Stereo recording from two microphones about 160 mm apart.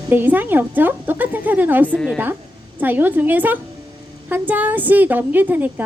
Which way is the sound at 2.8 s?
10° right (ahead or behind).